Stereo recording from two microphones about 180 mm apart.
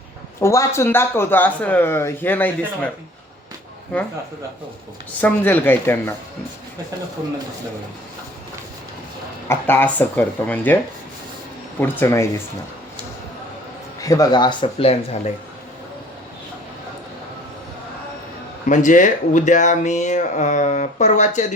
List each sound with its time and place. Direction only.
0.3 s speech: 15° left (ahead or behind)
5.2 s speech: 10° left (ahead or behind)
9.5 s speech: 10° left (ahead or behind)
11.8 s speech: 15° left (ahead or behind)
14.0 s speech: 20° left (ahead or behind)
18.7 s speech: 45° left (ahead or behind)